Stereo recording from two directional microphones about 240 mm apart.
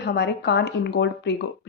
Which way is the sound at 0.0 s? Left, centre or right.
Left.